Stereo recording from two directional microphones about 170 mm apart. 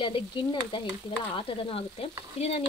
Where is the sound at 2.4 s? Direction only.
35° left (ahead or behind).